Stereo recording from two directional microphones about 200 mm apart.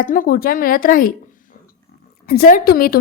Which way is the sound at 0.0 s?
45° left (ahead or behind).